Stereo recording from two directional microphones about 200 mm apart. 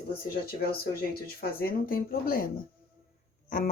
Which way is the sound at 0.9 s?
50° left (ahead or behind).